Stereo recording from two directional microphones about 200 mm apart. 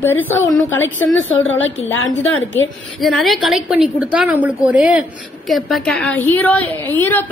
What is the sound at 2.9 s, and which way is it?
A woman's voice, centre (ahead or behind).